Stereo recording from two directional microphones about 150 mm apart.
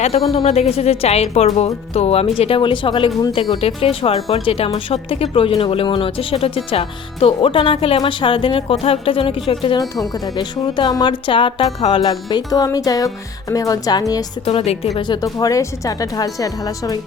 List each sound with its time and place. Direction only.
0.3 s speech: 45° left (ahead or behind); by 14.0 s 25° left (ahead or behind)
14.4 s speech: 40° left (ahead or behind)
14.9 s speech: 30° left (ahead or behind)